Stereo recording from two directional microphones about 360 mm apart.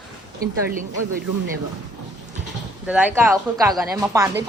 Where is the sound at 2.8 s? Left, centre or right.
Centre.